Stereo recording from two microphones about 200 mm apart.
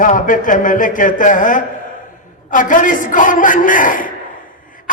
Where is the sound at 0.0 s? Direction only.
40° left (ahead or behind).